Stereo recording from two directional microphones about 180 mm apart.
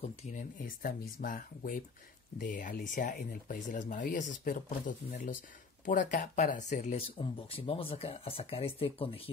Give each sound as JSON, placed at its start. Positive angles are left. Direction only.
{"t": 0.0, "sound": "speech", "side_deg": 40}